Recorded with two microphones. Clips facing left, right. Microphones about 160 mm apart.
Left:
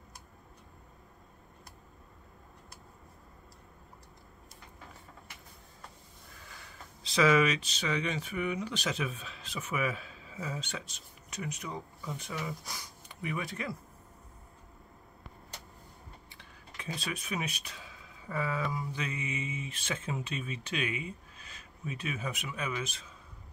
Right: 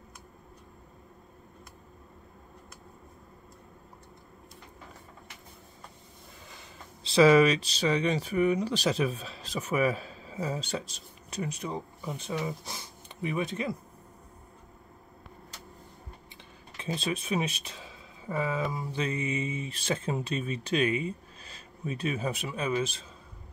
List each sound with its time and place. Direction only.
6.4 s speech: 20° right (ahead or behind)
16.3 s speech: 25° right (ahead or behind)